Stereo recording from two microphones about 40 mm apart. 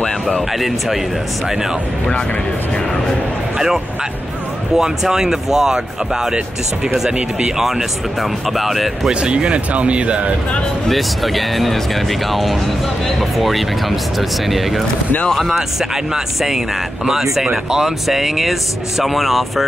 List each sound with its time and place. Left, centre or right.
0.5 s speech: centre
3.5 s speech: centre
7.1 s speech: right
7.5 s speech: centre
9.1 s speech: right
10.9 s speech: centre
15.5 s speech: centre